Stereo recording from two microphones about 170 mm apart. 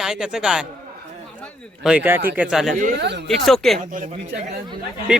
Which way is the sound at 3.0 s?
90° right.